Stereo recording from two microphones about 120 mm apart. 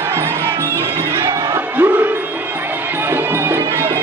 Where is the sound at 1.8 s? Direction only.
15° right (ahead or behind).